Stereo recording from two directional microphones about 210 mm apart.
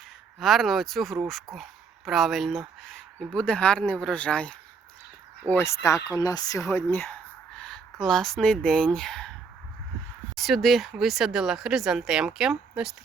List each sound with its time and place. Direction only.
0.3 s speech: centre (ahead or behind)
10.3 s speech: centre (ahead or behind)